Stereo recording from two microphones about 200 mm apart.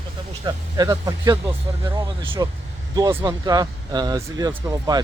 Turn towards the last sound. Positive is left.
turn(degrees=-20)  # may be behind; listen again after turning